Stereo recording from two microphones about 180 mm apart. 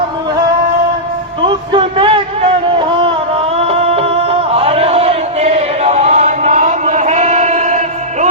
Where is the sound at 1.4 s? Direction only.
30° right (ahead or behind).